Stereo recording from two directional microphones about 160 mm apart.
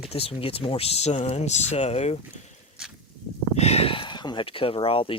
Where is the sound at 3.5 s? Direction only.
40° left (ahead or behind).